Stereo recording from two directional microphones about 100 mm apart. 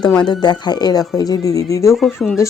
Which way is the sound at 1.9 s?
Centre (ahead or behind).